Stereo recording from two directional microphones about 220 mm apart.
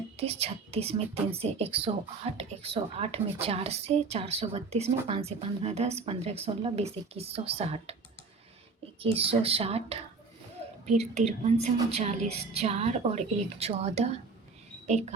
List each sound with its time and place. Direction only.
0.2 s a woman's voice: 25° right (ahead or behind)
9.0 s a woman's voice: 25° right (ahead or behind)